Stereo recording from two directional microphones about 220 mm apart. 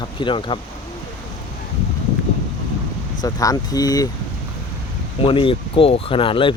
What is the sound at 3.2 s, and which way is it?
Speech, 15° left (ahead or behind).